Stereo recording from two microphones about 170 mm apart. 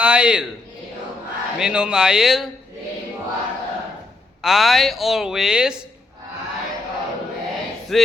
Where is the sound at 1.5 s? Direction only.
5° right (ahead or behind).